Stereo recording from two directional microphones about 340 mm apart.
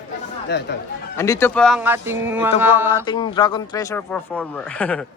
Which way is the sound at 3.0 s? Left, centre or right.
Centre.